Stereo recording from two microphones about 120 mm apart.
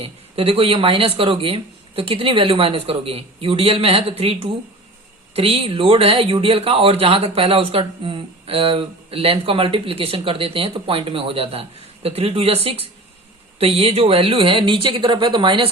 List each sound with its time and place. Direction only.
0.0 s speech: 55° right (ahead or behind)